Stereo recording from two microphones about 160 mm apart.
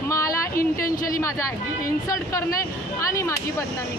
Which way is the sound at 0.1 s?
20° left (ahead or behind).